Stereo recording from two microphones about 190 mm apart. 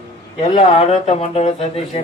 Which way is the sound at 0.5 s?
30° left (ahead or behind).